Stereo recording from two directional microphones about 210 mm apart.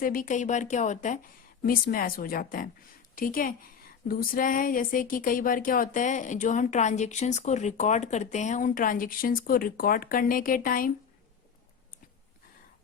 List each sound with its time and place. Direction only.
0.0 s speech: 40° left (ahead or behind)